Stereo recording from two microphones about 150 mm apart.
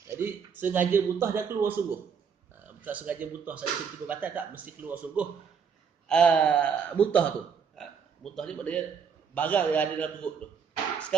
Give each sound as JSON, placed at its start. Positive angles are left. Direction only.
{"t": 0.1, "sound": "a man's voice", "side_deg": -15}
{"t": 6.0, "sound": "a man's voice", "side_deg": 5}